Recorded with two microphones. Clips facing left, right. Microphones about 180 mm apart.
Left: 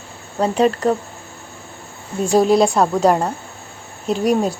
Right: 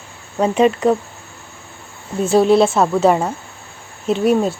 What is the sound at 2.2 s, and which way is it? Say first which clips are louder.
Speech: right 1 dB; centre (ahead or behind).